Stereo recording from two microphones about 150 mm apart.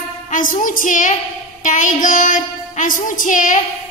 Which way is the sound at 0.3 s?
60° left (ahead or behind).